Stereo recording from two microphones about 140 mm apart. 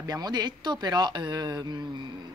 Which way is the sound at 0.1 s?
30° right (ahead or behind).